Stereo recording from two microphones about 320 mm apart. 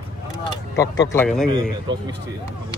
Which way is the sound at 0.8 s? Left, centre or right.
Centre.